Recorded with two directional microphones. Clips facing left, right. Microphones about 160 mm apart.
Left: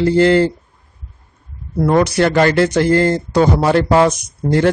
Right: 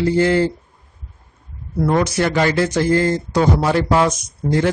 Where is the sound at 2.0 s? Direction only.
65° left (ahead or behind).